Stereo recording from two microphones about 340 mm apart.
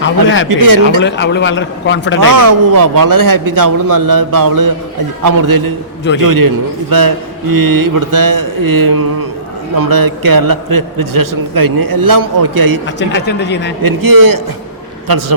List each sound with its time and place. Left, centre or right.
0.0 s a man's voice: left
2.3 s a man's voice: right
9.7 s a man's voice: right
13.0 s a man's voice: left
13.8 s a man's voice: right
15.0 s a man's voice: right